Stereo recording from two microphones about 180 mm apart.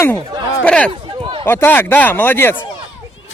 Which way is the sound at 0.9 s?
30° right (ahead or behind).